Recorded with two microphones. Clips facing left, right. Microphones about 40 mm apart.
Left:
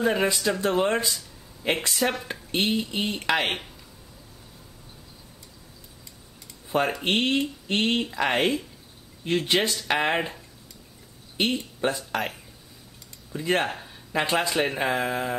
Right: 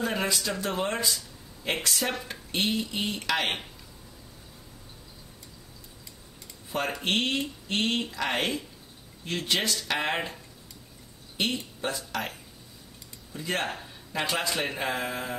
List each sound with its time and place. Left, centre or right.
0.0 s speech: centre
2.5 s speech: centre
6.9 s speech: centre
11.8 s a man's voice: left
13.3 s speech: centre
14.1 s a man's voice: left
14.5 s speech: centre